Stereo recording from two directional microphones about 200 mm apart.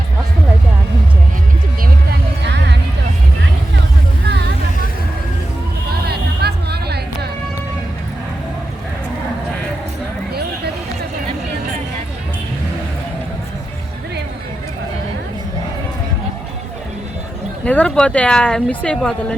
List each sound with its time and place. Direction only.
2.4 s music: 60° right (ahead or behind)
6.1 s music: 55° right (ahead or behind)
17.7 s speech: 5° left (ahead or behind)